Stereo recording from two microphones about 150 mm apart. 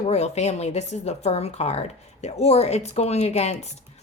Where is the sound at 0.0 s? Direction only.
45° left (ahead or behind).